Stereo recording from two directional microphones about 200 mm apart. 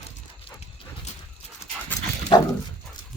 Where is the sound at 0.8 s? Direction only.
25° left (ahead or behind).